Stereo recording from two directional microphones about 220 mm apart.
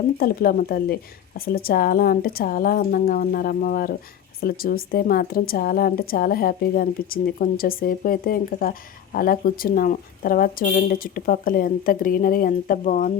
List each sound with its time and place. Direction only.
0.2 s a woman's voice: 40° left (ahead or behind)